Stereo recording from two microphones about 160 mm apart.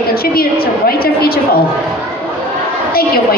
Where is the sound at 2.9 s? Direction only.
70° left (ahead or behind).